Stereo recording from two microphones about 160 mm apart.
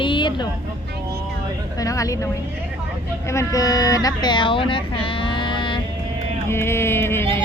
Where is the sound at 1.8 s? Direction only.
20° left (ahead or behind).